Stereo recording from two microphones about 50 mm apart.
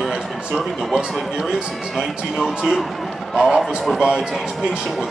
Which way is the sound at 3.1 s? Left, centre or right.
Centre.